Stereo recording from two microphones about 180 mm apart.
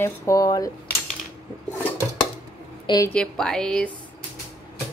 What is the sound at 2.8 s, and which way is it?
Speech, 20° left (ahead or behind).